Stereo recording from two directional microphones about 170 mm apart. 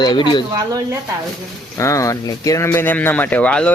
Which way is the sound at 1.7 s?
20° left (ahead or behind).